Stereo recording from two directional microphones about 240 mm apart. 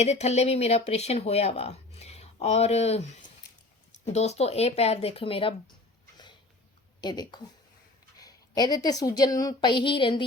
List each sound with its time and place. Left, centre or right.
0.0 s speech: left
7.0 s a woman's voice: centre